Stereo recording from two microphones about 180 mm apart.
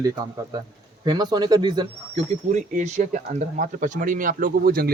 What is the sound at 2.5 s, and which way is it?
Speech, 40° right (ahead or behind).